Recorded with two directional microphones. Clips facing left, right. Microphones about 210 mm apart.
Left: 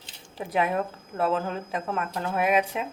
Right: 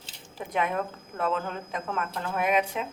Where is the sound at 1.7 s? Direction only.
5° left (ahead or behind).